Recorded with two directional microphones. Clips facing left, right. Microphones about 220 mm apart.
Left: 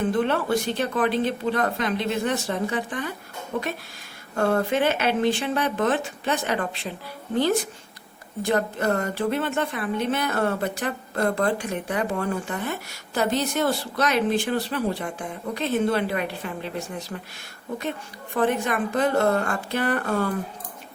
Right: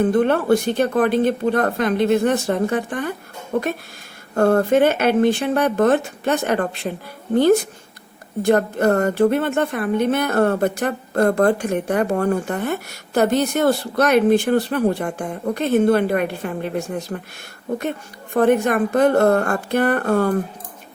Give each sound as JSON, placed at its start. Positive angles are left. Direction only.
{"t": 0.0, "sound": "a woman's voice", "side_deg": -50}
{"t": 4.4, "sound": "a woman's voice", "side_deg": -50}
{"t": 8.4, "sound": "a woman's voice", "side_deg": -55}
{"t": 18.3, "sound": "a woman's voice", "side_deg": -55}